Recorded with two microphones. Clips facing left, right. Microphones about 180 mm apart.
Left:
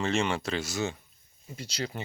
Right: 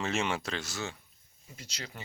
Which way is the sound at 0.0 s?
Centre (ahead or behind).